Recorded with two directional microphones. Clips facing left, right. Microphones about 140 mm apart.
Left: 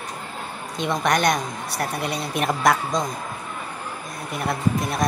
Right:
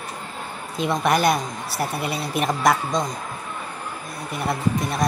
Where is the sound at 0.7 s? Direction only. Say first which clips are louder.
Right 1 dB; centre (ahead or behind).